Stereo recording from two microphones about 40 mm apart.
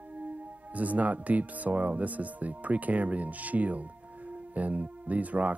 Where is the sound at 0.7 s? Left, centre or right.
Right.